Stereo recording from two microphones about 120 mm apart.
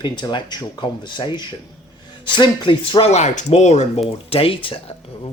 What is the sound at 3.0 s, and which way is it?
Speech, 75° left (ahead or behind).